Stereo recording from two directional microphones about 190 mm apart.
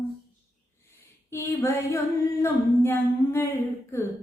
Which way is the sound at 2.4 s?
10° left (ahead or behind).